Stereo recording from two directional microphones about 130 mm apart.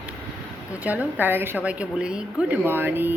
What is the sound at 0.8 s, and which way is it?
Speech, 15° right (ahead or behind).